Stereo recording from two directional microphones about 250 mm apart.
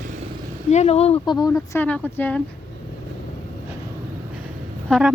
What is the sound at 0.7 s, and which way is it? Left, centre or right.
Speech, left.